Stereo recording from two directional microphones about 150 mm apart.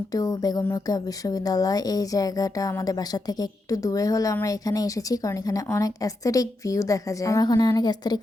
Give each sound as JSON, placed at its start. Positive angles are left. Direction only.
{"t": 0.1, "sound": "speech", "side_deg": 25}